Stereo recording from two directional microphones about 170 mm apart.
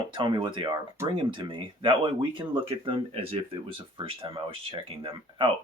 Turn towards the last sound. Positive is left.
turn(degrees=-30)  # may be behind; listen again after turning